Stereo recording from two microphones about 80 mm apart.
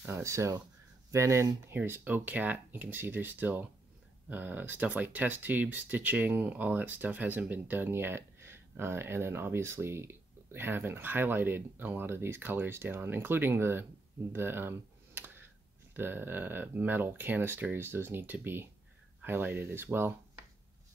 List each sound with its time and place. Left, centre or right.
0.2 s speech: right
1.8 s speech: right
14.3 s computer keyboard: right
15.9 s speech: right